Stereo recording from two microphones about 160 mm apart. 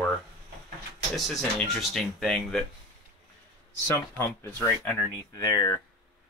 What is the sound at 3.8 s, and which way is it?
Speech, 15° left (ahead or behind).